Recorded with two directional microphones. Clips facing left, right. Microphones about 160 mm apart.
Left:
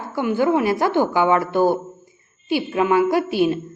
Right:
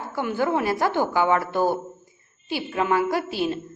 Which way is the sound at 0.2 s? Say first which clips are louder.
Left 5 dB; 15° left (ahead or behind).